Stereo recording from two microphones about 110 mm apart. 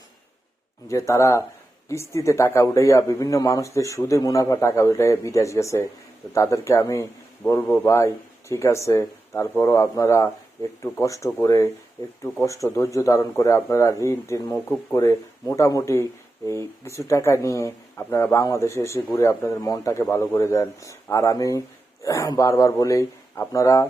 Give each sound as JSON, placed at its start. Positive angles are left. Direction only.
{"t": 0.9, "sound": "speech", "side_deg": 30}